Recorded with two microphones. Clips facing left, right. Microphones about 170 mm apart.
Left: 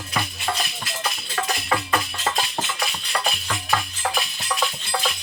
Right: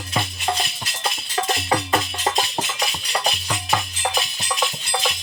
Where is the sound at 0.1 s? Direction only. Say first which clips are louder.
Right 3 dB; 25° right (ahead or behind).